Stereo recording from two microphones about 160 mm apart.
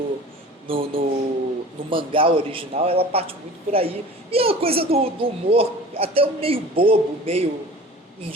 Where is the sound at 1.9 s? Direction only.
35° right (ahead or behind).